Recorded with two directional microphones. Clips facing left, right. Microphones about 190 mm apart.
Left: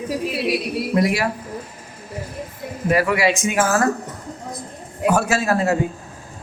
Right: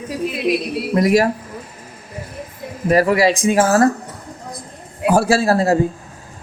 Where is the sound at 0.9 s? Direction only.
40° right (ahead or behind).